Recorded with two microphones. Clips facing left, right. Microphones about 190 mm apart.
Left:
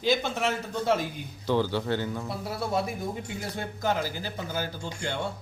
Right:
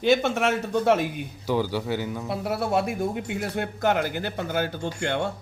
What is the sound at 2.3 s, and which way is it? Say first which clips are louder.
Speech: right 7 dB; 70° right (ahead or behind).